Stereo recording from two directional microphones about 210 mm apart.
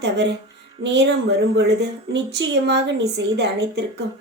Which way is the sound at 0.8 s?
55° right (ahead or behind).